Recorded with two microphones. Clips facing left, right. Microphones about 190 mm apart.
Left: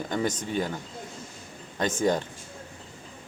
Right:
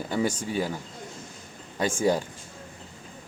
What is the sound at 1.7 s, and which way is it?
Speech, 10° right (ahead or behind).